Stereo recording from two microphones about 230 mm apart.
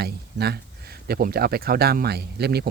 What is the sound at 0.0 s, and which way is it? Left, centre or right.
Speech, right.